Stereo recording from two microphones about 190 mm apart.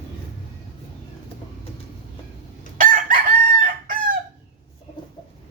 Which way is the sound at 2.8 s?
45° right (ahead or behind).